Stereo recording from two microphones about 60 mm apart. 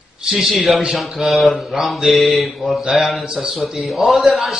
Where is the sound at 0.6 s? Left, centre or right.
Centre.